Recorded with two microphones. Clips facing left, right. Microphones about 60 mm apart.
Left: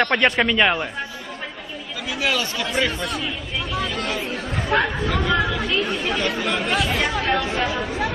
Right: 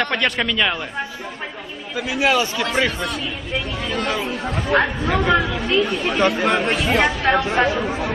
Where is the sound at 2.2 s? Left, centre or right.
Right.